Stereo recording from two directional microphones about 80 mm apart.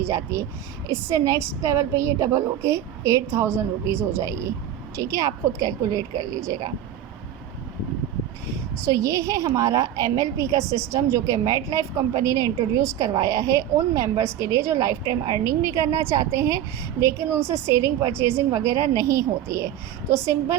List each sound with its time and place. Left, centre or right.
0.0 s a woman's voice: right
8.9 s a woman's voice: right